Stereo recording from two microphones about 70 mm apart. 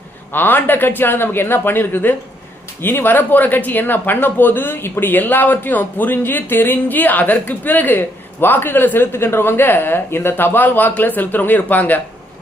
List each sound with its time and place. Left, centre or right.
0.3 s speech: left